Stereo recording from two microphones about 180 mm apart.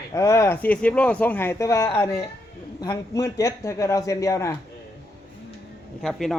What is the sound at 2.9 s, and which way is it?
Speech, 20° left (ahead or behind).